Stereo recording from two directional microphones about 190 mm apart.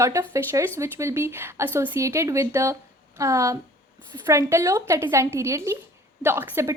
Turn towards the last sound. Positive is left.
turn(degrees=-10)  # may be behind; listen again after turning